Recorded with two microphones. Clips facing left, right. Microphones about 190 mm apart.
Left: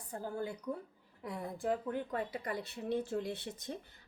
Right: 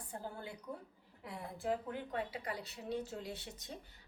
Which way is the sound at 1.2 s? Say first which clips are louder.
Left 4 dB; 45° left (ahead or behind).